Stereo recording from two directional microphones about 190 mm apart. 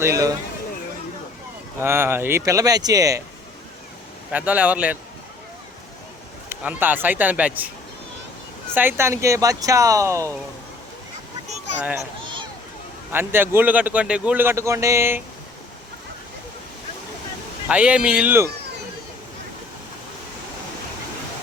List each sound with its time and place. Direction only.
0.0 s a man's voice: 15° right (ahead or behind)
1.8 s a man's voice: 10° right (ahead or behind)
4.3 s a man's voice: 5° right (ahead or behind)
6.5 s a man's voice: 10° right (ahead or behind)
8.7 s a man's voice: 10° right (ahead or behind)
11.8 s a man's voice: 10° right (ahead or behind)
13.1 s a man's voice: 10° right (ahead or behind)
17.7 s a man's voice: 5° right (ahead or behind)